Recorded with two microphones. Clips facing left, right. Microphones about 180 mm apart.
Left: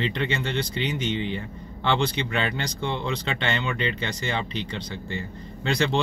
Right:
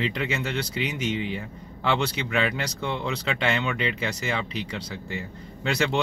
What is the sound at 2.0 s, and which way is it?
Speech, 10° right (ahead or behind).